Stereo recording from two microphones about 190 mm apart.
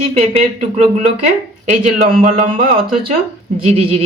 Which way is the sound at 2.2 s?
40° right (ahead or behind).